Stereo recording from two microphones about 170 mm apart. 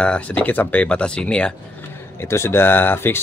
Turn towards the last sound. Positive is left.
turn(degrees=15)  # may be behind; listen again after turning